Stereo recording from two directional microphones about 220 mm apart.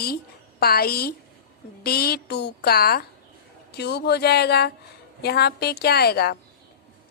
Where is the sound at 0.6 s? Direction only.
45° left (ahead or behind).